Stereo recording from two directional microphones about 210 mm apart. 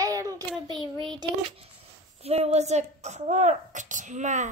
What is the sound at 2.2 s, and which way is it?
A woman's voice, 30° right (ahead or behind).